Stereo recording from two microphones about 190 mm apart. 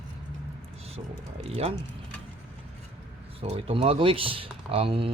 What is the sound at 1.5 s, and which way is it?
Speech, 30° right (ahead or behind).